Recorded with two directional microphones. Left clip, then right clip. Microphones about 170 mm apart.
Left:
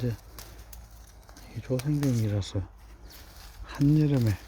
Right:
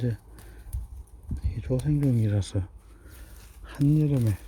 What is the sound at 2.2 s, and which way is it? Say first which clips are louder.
Speech: right 1 dB; 30° right (ahead or behind).